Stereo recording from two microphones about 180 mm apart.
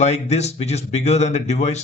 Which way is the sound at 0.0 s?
40° left (ahead or behind).